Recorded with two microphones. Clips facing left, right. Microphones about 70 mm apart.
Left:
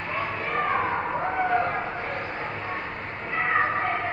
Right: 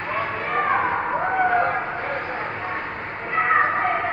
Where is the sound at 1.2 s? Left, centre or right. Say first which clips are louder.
Right 5 dB; right.